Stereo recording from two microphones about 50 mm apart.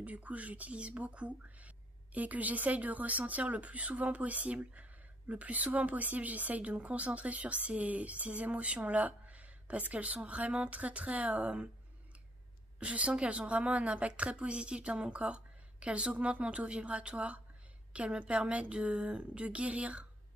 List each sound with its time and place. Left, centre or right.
0.0 s a woman's voice: right
12.7 s speech: right